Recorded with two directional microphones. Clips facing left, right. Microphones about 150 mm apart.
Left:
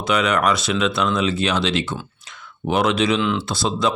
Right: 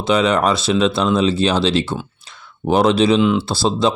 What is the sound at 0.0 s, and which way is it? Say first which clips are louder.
Speech: right 4 dB; 30° right (ahead or behind).